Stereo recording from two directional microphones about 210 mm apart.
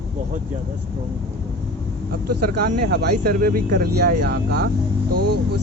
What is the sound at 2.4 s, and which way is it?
Speech, 50° right (ahead or behind).